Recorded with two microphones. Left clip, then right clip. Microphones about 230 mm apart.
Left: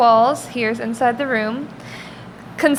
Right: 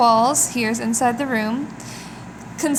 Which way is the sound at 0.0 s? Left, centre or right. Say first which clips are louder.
Left 2 dB; centre.